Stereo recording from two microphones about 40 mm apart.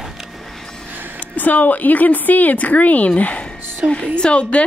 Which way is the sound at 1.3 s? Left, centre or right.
Left.